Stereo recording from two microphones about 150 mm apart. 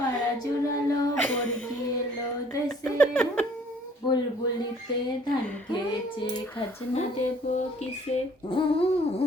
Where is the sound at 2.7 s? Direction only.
10° left (ahead or behind).